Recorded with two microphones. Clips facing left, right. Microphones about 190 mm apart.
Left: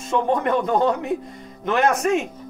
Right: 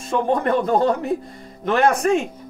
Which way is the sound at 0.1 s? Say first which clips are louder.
Right 1 dB; 35° right (ahead or behind).